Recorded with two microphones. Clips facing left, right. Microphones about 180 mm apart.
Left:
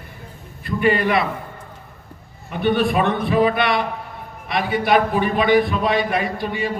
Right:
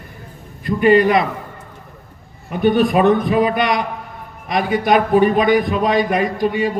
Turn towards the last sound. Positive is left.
turn(degrees=-40)  # may be behind; listen again after turning